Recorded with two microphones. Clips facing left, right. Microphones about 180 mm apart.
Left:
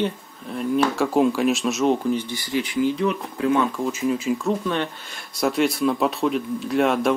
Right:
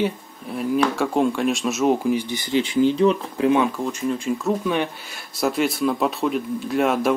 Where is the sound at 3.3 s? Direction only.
15° right (ahead or behind).